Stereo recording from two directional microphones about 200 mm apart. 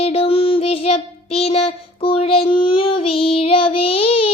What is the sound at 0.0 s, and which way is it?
Child singing, 30° left (ahead or behind).